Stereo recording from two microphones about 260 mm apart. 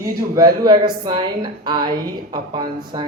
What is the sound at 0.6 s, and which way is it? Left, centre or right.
A man's voice, centre.